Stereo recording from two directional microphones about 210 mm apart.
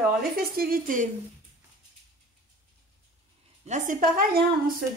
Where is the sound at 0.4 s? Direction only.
45° right (ahead or behind).